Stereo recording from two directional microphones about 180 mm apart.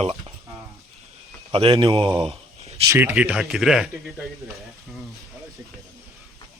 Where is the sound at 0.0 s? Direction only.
35° right (ahead or behind).